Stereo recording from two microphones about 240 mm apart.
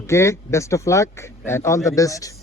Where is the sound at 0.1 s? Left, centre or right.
Centre.